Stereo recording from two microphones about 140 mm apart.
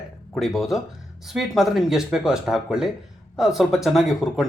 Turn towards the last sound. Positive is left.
turn(degrees=0)  # may be behind; listen again after turning